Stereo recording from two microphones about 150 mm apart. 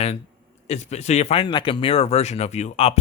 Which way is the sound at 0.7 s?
45° left (ahead or behind).